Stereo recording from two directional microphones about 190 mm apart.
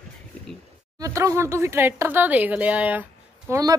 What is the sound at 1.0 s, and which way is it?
Speech, 15° right (ahead or behind).